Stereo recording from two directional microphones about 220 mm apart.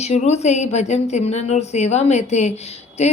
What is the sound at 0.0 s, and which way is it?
A woman's voice, 30° left (ahead or behind).